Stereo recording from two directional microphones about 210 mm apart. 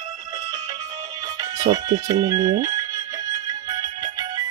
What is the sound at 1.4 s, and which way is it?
Music, 20° right (ahead or behind).